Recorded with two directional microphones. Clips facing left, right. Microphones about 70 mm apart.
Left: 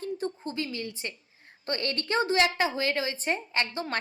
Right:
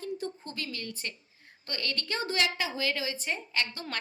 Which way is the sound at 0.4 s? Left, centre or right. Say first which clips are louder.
Left 5 dB; left.